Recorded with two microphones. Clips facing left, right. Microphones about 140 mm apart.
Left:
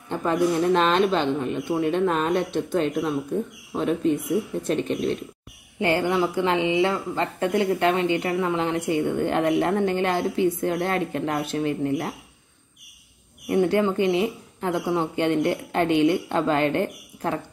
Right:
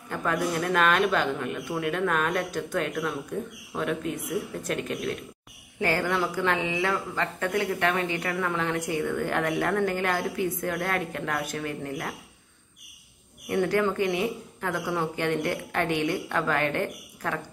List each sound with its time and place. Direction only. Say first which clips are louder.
0.1 s a woman's voice: left 5 dB; 25° left (ahead or behind)
13.5 s a woman's voice: left 4 dB; 25° left (ahead or behind)